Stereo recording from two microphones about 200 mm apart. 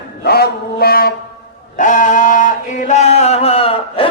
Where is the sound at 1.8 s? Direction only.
40° left (ahead or behind).